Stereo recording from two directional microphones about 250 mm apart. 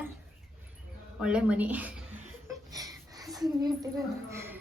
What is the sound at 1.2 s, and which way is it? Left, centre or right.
Speech, centre.